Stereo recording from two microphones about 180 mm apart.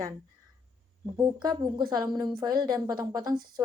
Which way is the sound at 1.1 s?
20° right (ahead or behind).